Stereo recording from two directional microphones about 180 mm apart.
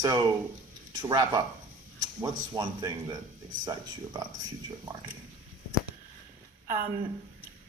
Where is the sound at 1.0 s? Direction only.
20° right (ahead or behind).